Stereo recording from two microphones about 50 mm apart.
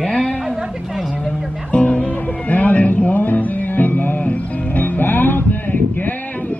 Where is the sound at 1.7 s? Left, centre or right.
Left.